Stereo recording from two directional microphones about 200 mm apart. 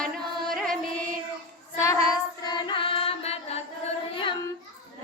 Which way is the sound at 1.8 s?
20° left (ahead or behind).